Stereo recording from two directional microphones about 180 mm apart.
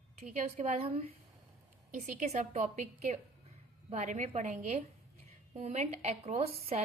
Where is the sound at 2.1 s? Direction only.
40° right (ahead or behind).